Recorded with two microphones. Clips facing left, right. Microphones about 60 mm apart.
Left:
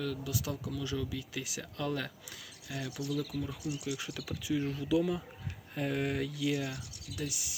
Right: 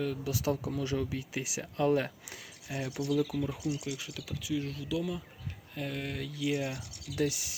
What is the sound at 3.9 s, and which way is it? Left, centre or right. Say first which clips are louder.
Speech: left 1 dB; centre.